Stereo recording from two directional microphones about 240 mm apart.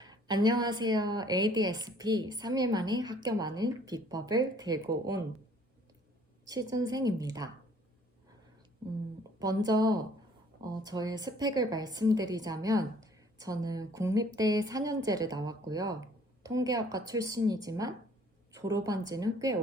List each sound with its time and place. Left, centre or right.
0.0 s a woman's voice: centre
6.4 s a woman's voice: centre
9.4 s a woman's voice: centre